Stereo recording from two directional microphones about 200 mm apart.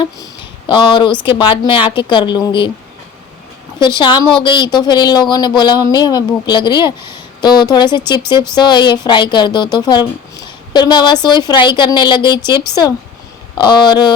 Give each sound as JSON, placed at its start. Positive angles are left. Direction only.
{"t": 0.7, "sound": "speech", "side_deg": 25}
{"t": 3.8, "sound": "speech", "side_deg": 20}
{"t": 13.6, "sound": "speech", "side_deg": 20}